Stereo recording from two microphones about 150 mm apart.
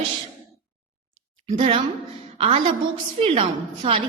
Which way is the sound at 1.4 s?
40° right (ahead or behind).